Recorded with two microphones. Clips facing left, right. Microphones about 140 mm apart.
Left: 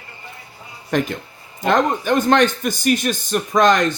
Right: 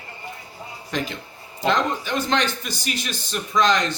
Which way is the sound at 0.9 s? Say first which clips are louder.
Left 8 dB; 50° left (ahead or behind).